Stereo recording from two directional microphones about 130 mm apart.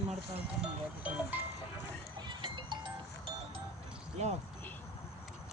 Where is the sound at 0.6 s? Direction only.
10° right (ahead or behind).